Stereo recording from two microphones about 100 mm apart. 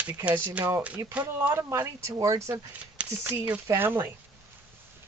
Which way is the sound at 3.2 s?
15° right (ahead or behind).